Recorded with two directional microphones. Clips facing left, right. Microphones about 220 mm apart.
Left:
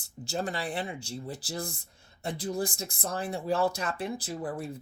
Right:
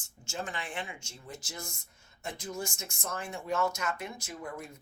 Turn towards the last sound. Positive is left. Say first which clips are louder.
# left 7 dB
turn(degrees=35)  # may be behind; listen again after turning